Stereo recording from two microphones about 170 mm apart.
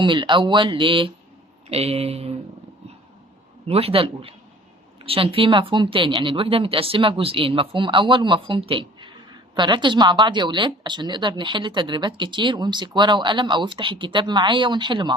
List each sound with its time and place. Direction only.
0.0 s a woman's voice: 30° right (ahead or behind)
3.7 s a woman's voice: 35° right (ahead or behind)